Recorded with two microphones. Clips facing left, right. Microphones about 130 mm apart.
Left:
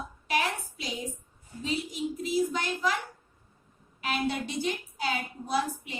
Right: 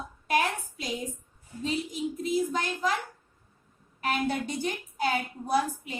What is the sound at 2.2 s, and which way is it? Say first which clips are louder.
Speech: even; 50° right (ahead or behind).